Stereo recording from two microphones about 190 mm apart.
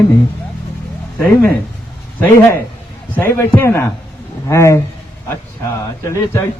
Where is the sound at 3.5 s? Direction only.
15° left (ahead or behind).